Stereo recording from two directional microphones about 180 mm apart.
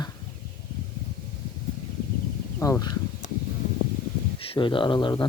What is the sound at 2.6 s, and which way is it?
Speech, 20° left (ahead or behind).